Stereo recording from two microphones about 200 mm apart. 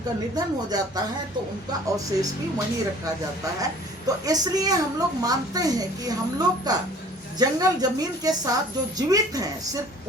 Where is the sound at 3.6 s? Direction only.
20° right (ahead or behind).